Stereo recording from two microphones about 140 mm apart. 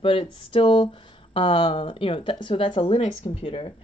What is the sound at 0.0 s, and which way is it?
Speech, 40° left (ahead or behind).